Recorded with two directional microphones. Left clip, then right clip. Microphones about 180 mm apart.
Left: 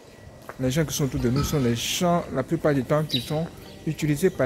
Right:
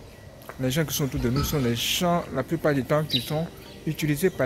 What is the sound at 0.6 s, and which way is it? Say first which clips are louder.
Speech: left 1 dB; 15° left (ahead or behind).